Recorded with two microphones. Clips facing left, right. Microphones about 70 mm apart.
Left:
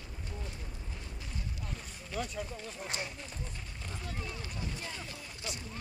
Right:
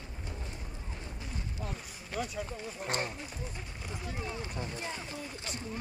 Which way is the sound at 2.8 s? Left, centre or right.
Right.